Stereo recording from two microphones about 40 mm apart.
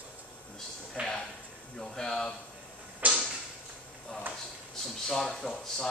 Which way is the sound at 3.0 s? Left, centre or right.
Right.